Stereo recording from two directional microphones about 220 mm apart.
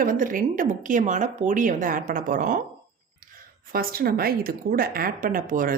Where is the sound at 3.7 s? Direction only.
40° right (ahead or behind).